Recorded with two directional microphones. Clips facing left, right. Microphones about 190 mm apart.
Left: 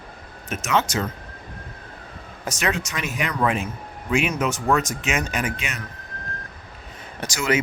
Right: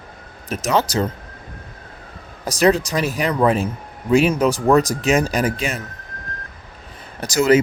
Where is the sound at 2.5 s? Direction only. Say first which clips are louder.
Right 10 dB; 35° right (ahead or behind).